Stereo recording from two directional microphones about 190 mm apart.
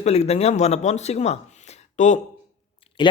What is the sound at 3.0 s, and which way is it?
Speech, 25° left (ahead or behind).